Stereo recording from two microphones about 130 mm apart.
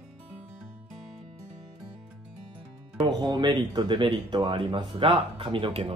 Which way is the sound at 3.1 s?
35° right (ahead or behind).